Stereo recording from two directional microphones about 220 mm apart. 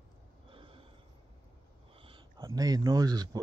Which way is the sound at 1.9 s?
25° right (ahead or behind).